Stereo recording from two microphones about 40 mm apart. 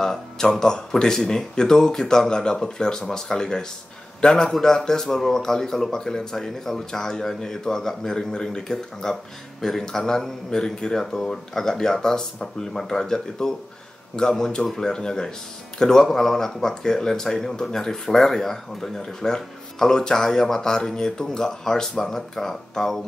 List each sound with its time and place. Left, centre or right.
0.0 s speech: centre